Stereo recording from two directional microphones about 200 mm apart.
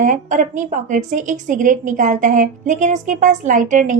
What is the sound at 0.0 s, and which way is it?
A woman's voice, 40° right (ahead or behind).